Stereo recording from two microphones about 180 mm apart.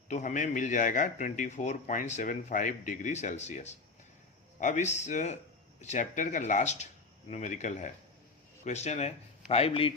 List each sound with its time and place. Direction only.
0.1 s a man's voice: 45° left (ahead or behind)